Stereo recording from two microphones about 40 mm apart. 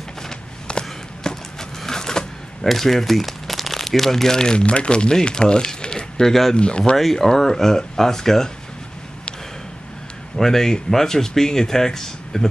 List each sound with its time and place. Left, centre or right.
0.3 s a sound: centre
2.6 s speech: centre; by 6.8 s left
7.0 s speech: centre
10.3 s speech: centre